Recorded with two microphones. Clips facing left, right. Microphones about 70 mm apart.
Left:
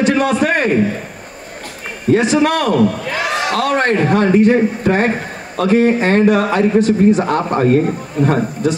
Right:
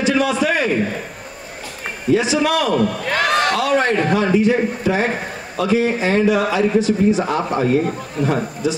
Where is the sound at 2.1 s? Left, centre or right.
Left.